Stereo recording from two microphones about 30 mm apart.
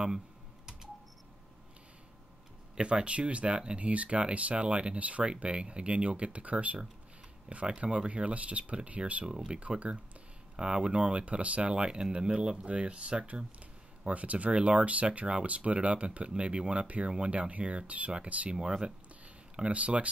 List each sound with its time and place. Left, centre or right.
2.8 s speech: right
9.5 s speech: right
11.7 s speech: right
14.0 s speech: right
15.0 s speech: right
18.5 s speech: right
19.7 s speech: right